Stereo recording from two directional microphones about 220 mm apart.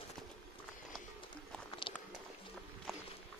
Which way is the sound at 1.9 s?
25° left (ahead or behind).